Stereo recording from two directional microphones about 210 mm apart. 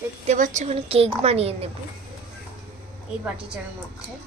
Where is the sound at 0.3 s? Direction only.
35° right (ahead or behind).